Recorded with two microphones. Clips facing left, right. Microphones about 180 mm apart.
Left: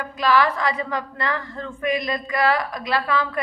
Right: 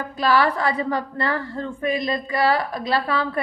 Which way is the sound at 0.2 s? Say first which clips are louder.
Even; 35° right (ahead or behind).